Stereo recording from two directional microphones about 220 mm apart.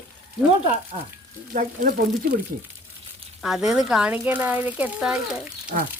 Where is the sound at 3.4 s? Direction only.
Centre (ahead or behind).